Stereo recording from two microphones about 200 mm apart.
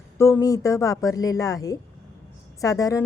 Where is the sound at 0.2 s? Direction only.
15° left (ahead or behind).